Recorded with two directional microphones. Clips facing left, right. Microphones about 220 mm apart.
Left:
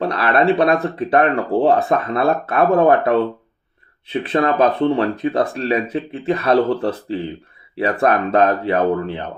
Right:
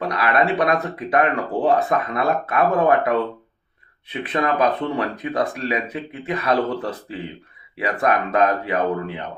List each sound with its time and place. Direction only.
0.0 s speech: 30° left (ahead or behind)
4.1 s speech: 30° left (ahead or behind)
7.8 s speech: 30° left (ahead or behind)